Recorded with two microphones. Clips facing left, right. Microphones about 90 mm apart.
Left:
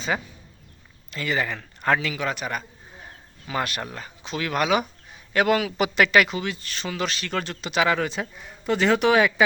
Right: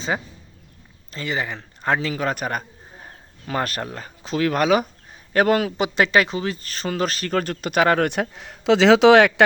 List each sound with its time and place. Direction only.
0.1 s a man's voice: 25° right (ahead or behind); by 5.7 s 40° right (ahead or behind)
5.7 s speech: 25° right (ahead or behind); by 9.3 s 85° right